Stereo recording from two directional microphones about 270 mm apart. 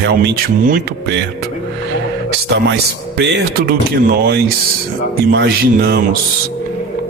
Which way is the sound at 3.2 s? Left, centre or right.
Right.